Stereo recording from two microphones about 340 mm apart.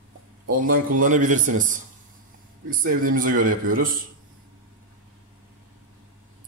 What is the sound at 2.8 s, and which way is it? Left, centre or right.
Speech, right.